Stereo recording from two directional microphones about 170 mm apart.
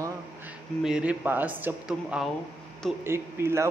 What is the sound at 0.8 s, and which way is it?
Speech, 5° right (ahead or behind).